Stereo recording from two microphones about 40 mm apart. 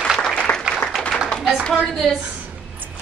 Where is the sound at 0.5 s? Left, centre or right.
Left.